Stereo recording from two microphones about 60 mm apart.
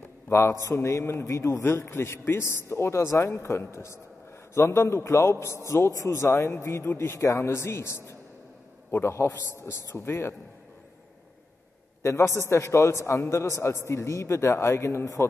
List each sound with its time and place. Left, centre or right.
0.3 s a man's voice: left
0.7 s speech: left
1.6 s speech: left
5.7 s speech: left
12.0 s speech: left